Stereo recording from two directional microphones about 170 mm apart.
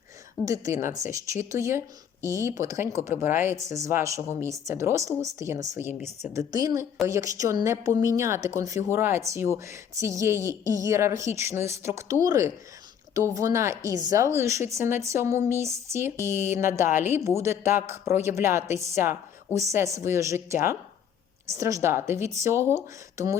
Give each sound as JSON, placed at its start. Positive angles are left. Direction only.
{"t": 0.4, "sound": "a woman's voice", "side_deg": -20}